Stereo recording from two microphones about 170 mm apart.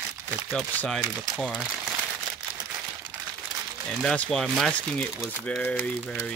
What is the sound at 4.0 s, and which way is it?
Speech, 5° left (ahead or behind).